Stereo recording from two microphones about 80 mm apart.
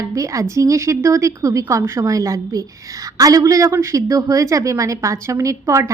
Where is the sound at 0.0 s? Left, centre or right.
Right.